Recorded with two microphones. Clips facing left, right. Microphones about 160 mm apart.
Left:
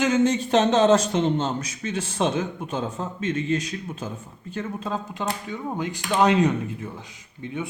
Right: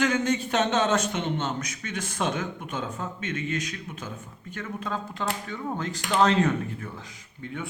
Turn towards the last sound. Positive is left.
turn(degrees=20)  # may be behind; listen again after turning